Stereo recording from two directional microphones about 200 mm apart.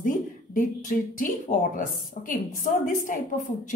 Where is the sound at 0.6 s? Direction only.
40° left (ahead or behind).